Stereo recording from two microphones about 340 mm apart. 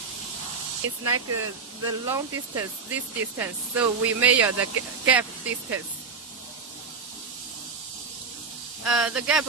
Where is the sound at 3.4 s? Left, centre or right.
Centre.